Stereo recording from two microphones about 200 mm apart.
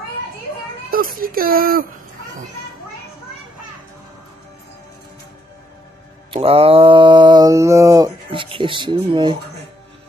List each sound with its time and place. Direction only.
0.8 s a child's voice: 45° right (ahead or behind)
6.3 s mantra: 30° right (ahead or behind)